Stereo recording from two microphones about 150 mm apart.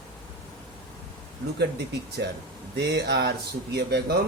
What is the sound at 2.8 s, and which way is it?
Speech, 90° right.